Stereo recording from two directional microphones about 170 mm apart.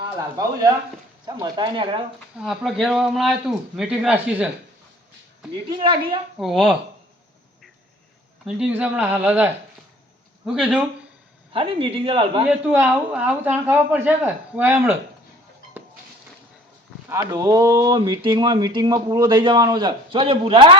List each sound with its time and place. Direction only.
0.0 s speech: 20° right (ahead or behind)
2.4 s speech: 5° right (ahead or behind)
5.7 s speech: 25° right (ahead or behind)
6.4 s speech: centre (ahead or behind)
8.4 s speech: 5° right (ahead or behind)
11.5 s speech: 35° right (ahead or behind)
12.5 s speech: 10° right (ahead or behind)
17.1 s speech: 20° right (ahead or behind)